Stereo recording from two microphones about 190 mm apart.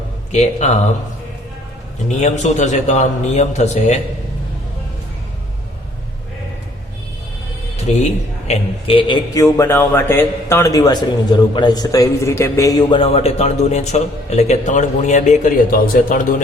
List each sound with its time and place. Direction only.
0.3 s a man's voice: 40° left (ahead or behind)
2.0 s a man's voice: 40° left (ahead or behind)
7.8 s music: 35° left (ahead or behind)
8.4 s speech: 30° left (ahead or behind); by 16.2 s 45° left (ahead or behind)